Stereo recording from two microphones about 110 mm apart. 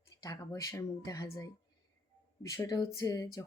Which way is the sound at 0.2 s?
30° left (ahead or behind).